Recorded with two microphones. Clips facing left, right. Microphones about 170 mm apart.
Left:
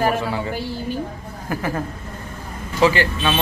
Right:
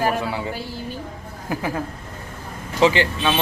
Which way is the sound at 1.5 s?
15° right (ahead or behind).